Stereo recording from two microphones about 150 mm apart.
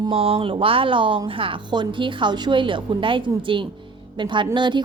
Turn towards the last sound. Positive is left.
turn(degrees=-30)  # may be behind; listen again after turning